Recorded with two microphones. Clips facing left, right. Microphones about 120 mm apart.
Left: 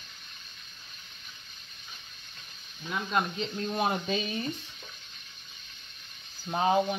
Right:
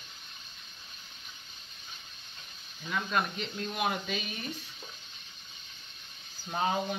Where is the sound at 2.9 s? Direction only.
25° left (ahead or behind).